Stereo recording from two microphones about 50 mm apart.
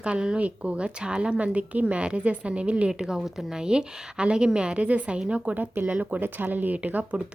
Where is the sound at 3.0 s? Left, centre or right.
Centre.